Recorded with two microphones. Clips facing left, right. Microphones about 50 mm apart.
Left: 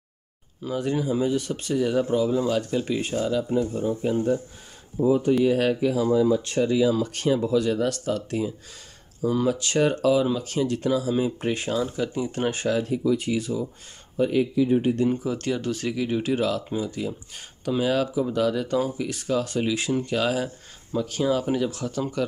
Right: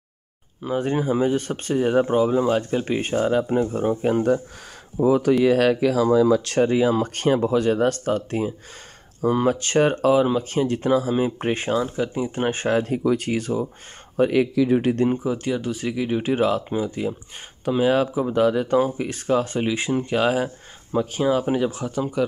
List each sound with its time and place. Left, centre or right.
0.6 s speech: right
4.9 s speech: right
6.6 s speech: right
14.1 s speech: right
15.2 s speech: centre